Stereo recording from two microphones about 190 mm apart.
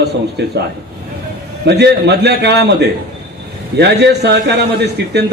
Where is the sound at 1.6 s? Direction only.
65° right (ahead or behind).